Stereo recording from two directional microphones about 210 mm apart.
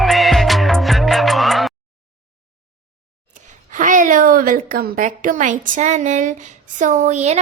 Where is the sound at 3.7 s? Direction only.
35° right (ahead or behind).